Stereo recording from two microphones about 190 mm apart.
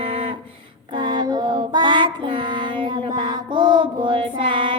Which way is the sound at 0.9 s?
25° right (ahead or behind).